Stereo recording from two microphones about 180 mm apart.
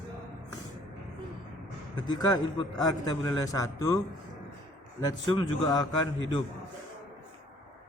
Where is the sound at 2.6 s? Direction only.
20° left (ahead or behind).